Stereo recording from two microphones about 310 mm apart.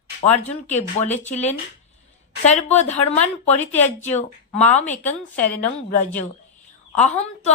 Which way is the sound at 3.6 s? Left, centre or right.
Centre.